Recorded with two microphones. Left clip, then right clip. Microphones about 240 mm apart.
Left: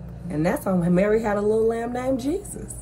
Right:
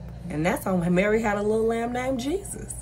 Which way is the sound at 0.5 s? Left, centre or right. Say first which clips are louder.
Left 1 dB; right.